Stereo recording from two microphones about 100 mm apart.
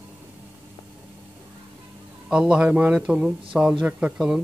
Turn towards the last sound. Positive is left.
turn(degrees=-10)  # may be behind; listen again after turning